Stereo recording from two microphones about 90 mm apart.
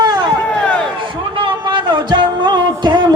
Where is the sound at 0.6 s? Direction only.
10° left (ahead or behind).